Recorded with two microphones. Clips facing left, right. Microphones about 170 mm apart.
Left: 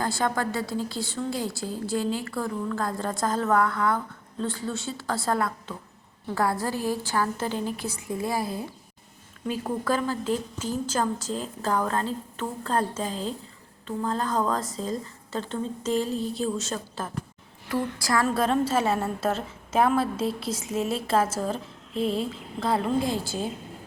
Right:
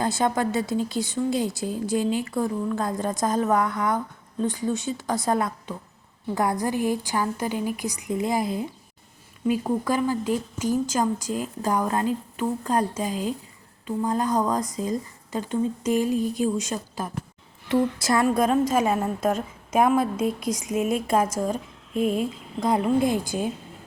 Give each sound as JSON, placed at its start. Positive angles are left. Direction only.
{"t": 0.0, "sound": "a woman's voice", "side_deg": -20}
{"t": 18.3, "sound": "a woman's voice", "side_deg": -10}